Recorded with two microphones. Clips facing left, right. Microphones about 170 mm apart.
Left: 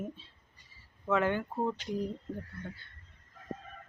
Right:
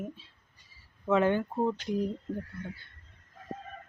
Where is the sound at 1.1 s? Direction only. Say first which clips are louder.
Right 4 dB; 20° right (ahead or behind).